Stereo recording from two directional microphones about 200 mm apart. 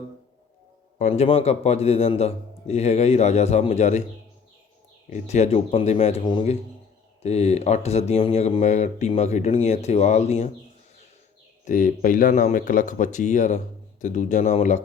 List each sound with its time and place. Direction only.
0.9 s speech: 35° left (ahead or behind)
5.0 s speech: 35° left (ahead or behind)
11.6 s speech: 40° left (ahead or behind)